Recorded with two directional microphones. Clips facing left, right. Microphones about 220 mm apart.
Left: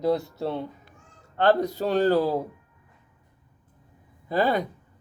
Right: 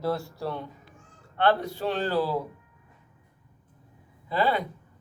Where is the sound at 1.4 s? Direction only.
40° left (ahead or behind).